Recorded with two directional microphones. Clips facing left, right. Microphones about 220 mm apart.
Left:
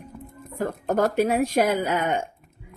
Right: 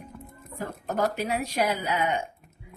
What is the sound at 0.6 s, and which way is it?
A woman's voice, 50° left (ahead or behind).